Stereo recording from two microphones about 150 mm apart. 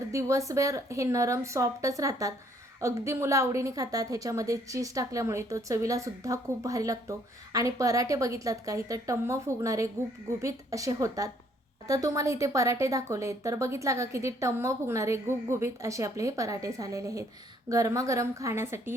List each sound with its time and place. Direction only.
0.1 s a woman's voice: 20° right (ahead or behind)